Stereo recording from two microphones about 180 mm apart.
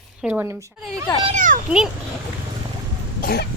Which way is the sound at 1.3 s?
45° right (ahead or behind).